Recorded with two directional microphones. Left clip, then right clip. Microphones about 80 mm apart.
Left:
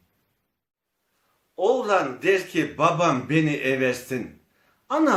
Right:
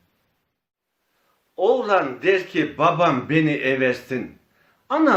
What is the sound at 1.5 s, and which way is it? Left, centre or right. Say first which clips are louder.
A man's voice: right 3 dB; right.